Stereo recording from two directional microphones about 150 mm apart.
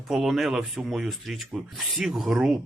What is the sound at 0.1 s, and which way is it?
Speech, centre (ahead or behind).